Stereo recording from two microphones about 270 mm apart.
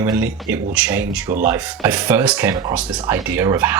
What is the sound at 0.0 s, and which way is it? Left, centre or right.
Speech, centre.